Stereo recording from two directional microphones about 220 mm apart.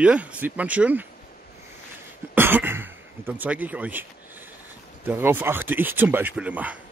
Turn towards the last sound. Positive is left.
turn(degrees=-5)  # may be behind; listen again after turning